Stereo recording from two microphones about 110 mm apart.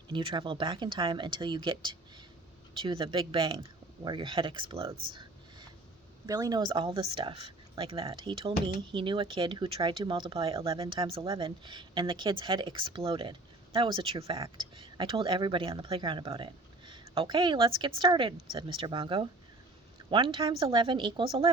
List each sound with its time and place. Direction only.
0.1 s speech: 50° right (ahead or behind)
6.2 s speech: 35° right (ahead or behind); by 21.5 s 50° right (ahead or behind)